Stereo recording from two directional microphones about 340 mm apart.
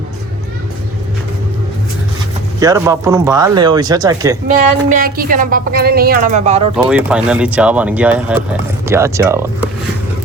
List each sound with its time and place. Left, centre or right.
2.6 s speech: centre
4.9 s a woman's voice: right
6.8 s speech: centre